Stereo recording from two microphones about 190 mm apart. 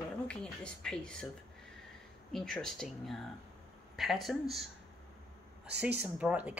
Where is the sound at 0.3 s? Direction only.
5° left (ahead or behind).